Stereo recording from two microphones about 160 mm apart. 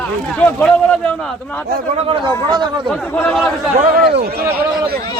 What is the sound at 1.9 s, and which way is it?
Speech, 30° right (ahead or behind).